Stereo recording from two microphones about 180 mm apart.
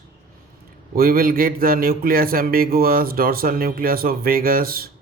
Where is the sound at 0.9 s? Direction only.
55° right (ahead or behind).